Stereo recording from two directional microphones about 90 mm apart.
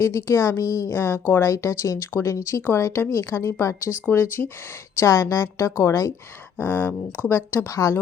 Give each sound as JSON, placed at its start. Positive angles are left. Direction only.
{"t": 0.0, "sound": "a woman's voice", "side_deg": 30}
{"t": 6.6, "sound": "speech", "side_deg": 25}